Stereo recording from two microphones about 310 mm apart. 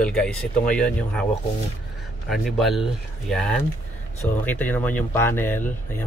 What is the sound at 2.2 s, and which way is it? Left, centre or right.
Speech, centre.